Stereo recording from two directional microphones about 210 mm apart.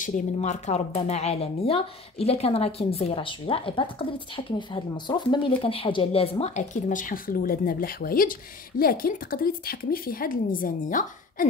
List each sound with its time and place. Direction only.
0.0 s a woman's voice: 35° left (ahead or behind)